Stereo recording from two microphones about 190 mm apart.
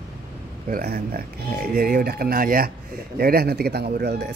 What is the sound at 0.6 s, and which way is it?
Speech, 50° right (ahead or behind).